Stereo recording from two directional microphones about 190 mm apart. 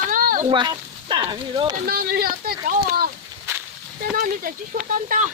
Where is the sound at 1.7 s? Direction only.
50° right (ahead or behind).